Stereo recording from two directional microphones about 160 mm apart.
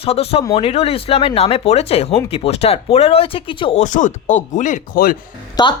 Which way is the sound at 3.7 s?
50° left (ahead or behind).